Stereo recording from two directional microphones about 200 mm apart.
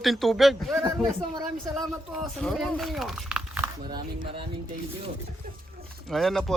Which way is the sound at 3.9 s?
20° right (ahead or behind).